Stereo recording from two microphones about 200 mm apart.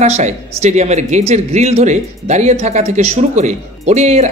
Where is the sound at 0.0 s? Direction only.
35° right (ahead or behind).